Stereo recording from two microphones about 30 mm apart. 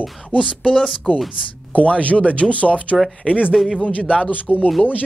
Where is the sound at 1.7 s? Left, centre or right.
Left.